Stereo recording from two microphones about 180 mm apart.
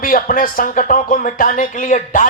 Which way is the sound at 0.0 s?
50° left (ahead or behind).